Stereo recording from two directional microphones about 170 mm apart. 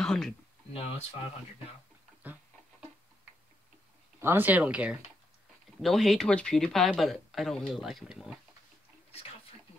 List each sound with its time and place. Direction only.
0.0 s speech: 5° left (ahead or behind)
0.7 s speech: 35° left (ahead or behind)
4.2 s speech: 10° right (ahead or behind)